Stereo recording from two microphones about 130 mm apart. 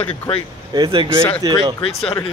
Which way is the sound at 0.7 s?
35° right (ahead or behind).